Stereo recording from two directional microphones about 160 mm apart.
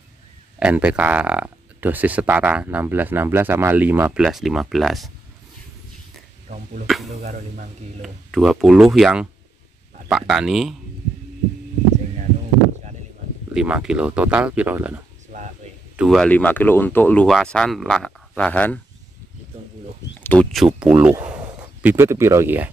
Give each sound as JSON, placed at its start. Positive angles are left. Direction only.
{"t": 0.6, "sound": "speech", "side_deg": -10}
{"t": 6.5, "sound": "speech", "side_deg": -50}
{"t": 6.9, "sound": "speech", "side_deg": 0}
{"t": 7.2, "sound": "speech", "side_deg": -50}
{"t": 8.0, "sound": "speech", "side_deg": 0}
{"t": 13.5, "sound": "speech", "side_deg": -5}
{"t": 16.0, "sound": "speech", "side_deg": 0}
{"t": 16.3, "sound": "speech", "side_deg": 10}
{"t": 20.2, "sound": "speech", "side_deg": 10}
{"t": 20.6, "sound": "speech", "side_deg": -5}